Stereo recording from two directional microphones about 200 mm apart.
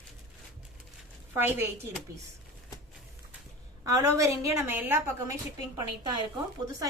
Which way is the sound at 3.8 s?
15° right (ahead or behind).